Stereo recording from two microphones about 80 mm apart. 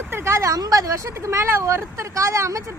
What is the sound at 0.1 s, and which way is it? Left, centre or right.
Speech, right.